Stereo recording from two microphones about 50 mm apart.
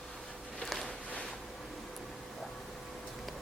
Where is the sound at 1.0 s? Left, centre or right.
Left.